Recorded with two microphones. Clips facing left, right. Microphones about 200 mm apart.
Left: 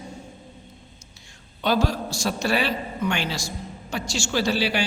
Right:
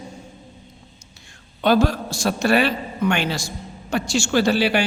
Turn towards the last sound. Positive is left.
turn(degrees=-55)  # may be behind; listen again after turning